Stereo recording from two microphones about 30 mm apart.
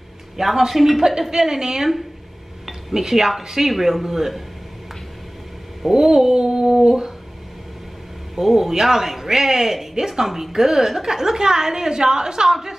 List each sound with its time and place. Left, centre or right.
0.4 s a woman's voice: centre
2.9 s a woman's voice: centre
3.6 s a woman's voice: centre
5.9 s a woman's voice: centre
8.4 s a woman's voice: centre